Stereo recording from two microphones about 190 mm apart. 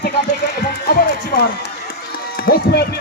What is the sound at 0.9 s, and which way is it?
Music, 55° left (ahead or behind).